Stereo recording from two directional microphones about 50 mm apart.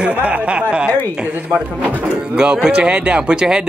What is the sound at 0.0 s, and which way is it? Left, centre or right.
Speech, right.